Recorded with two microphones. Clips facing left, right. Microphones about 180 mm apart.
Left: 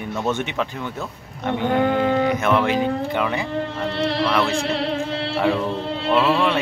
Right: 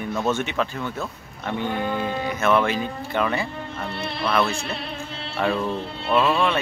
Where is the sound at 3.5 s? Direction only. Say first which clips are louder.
Left 7 dB; 90° left.